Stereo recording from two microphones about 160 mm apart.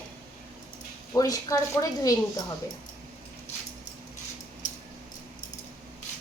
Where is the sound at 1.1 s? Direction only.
20° left (ahead or behind).